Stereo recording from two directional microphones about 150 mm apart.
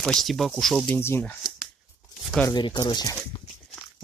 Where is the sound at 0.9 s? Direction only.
15° left (ahead or behind).